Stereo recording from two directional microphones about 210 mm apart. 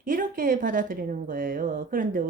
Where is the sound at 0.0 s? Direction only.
40° right (ahead or behind).